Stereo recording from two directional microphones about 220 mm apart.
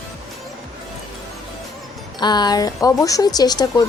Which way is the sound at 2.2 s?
20° left (ahead or behind).